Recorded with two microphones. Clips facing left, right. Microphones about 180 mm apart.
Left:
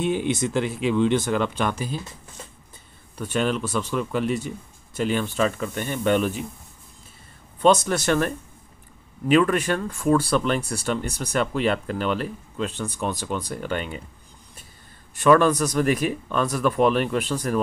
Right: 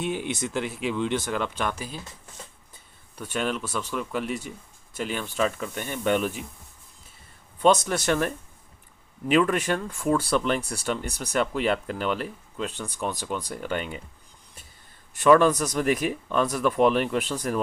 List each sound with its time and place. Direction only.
0.0 s speech: 5° right (ahead or behind)
3.2 s speech: 5° right (ahead or behind)
7.6 s speech: 15° right (ahead or behind)
9.3 s speech: 15° right (ahead or behind)
15.2 s speech: 15° right (ahead or behind)